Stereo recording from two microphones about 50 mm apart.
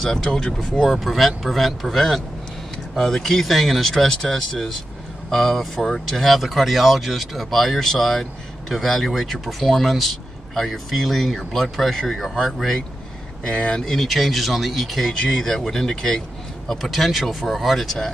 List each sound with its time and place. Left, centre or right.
0.0 s speech: centre
0.8 s speech: centre
13.5 s speech: centre
13.9 s speech: centre